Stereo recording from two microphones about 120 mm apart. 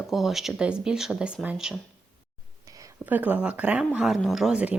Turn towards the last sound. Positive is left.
turn(degrees=-10)  # may be behind; listen again after turning